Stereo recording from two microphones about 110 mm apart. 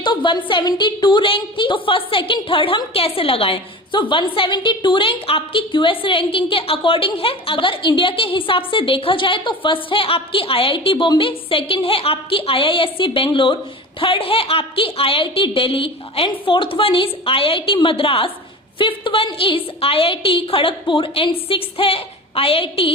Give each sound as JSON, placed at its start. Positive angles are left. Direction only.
{"t": 0.0, "sound": "a woman's voice", "side_deg": 45}